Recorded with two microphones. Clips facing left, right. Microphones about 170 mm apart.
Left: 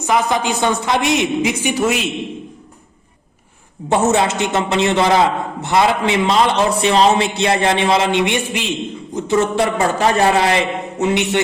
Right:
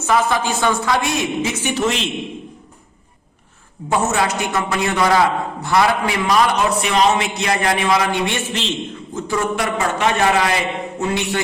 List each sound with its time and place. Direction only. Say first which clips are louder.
0.0 s a woman's voice: left 1 dB; 15° left (ahead or behind)
3.8 s a man's voice: left 4 dB; 25° left (ahead or behind)
9.2 s a man's voice: left 5 dB; 25° left (ahead or behind)